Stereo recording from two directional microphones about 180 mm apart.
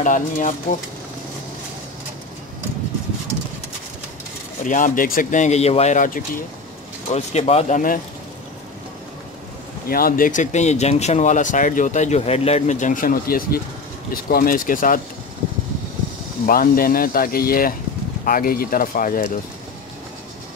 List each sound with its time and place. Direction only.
0.0 s speech: 45° left (ahead or behind)
4.6 s speech: 45° left (ahead or behind)
7.1 s speech: 35° left (ahead or behind)
9.8 s speech: 55° left (ahead or behind)
16.4 s speech: 55° left (ahead or behind)